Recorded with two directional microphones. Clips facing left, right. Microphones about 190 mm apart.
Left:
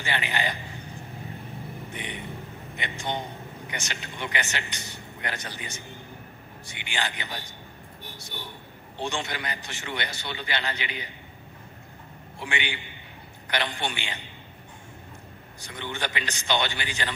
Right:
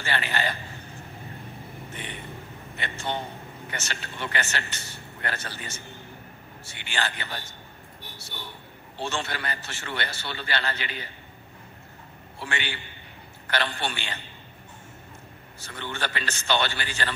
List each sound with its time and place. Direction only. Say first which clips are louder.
0.0 s a man's voice: right 1 dB; 15° left (ahead or behind)
1.9 s vehicle: even; 15° left (ahead or behind)
2.7 s a man's voice: even; 15° left (ahead or behind)
8.9 s a man's voice: even; 15° left (ahead or behind)
12.4 s a man's voice: left 1 dB; 15° left (ahead or behind)
15.6 s a man's voice: even; 15° left (ahead or behind)